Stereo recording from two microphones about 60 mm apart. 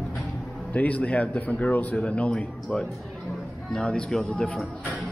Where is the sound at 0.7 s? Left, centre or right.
Left.